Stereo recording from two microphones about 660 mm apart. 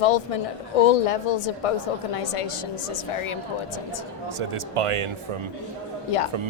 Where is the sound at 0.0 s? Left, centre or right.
Left.